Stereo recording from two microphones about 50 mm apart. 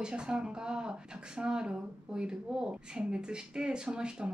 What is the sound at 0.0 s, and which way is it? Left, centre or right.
Speech, centre.